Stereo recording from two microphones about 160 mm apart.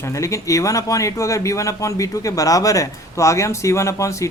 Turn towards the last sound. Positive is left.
turn(degrees=20)  # may be behind; listen again after turning